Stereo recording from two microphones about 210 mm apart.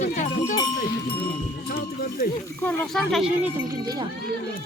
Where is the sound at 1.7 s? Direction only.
45° left (ahead or behind).